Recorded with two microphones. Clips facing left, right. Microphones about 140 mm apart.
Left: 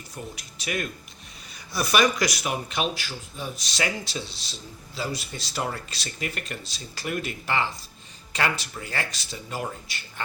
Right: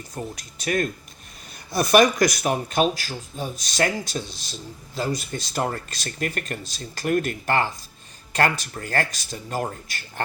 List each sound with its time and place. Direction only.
0.3 s speech: 45° right (ahead or behind)